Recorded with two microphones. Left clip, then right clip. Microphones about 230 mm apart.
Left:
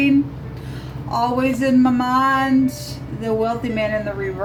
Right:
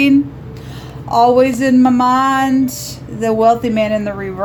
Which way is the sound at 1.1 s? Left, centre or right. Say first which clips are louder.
Right 9 dB; right.